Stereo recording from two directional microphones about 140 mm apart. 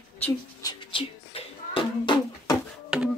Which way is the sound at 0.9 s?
40° left (ahead or behind).